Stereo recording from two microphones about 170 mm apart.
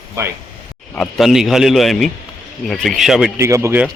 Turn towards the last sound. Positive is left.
turn(degrees=-15)  # may be behind; listen again after turning